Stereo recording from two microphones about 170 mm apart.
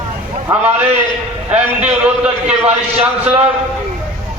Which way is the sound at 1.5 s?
10° right (ahead or behind).